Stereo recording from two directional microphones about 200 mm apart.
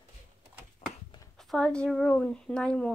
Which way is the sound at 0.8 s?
45° left (ahead or behind).